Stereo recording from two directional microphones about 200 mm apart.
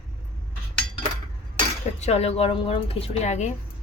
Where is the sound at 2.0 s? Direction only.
30° left (ahead or behind).